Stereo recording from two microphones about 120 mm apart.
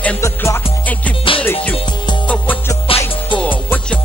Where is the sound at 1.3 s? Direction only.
45° left (ahead or behind).